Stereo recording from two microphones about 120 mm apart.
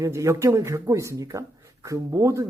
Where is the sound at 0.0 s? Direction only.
25° right (ahead or behind).